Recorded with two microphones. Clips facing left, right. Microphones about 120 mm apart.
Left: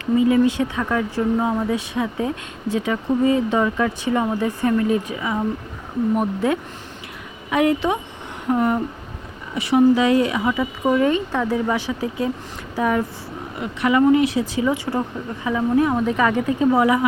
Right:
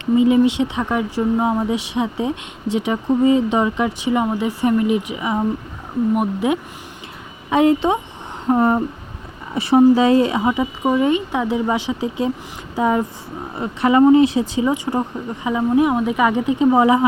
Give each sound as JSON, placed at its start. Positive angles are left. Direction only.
{"t": 0.0, "sound": "speech", "side_deg": -20}
{"t": 7.5, "sound": "speech", "side_deg": -25}
{"t": 8.4, "sound": "a sound", "side_deg": -30}
{"t": 9.6, "sound": "speech", "side_deg": -30}